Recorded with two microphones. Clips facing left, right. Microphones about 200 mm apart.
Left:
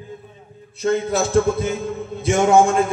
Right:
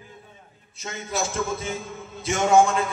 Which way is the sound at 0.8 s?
60° left (ahead or behind).